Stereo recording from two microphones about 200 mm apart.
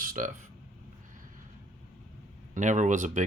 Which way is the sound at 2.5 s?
40° right (ahead or behind).